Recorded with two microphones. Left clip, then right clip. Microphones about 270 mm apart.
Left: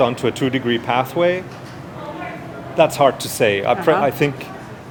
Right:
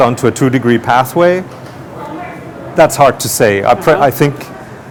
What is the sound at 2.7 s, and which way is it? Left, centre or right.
Speech, right.